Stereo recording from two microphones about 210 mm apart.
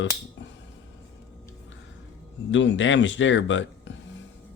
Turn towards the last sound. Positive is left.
turn(degrees=60)  # may be behind; listen again after turning